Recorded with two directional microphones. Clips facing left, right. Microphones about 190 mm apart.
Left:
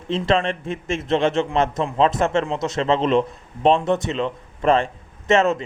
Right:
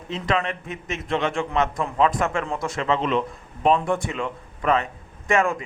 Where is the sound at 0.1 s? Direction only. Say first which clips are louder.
Left 5 dB; 30° left (ahead or behind).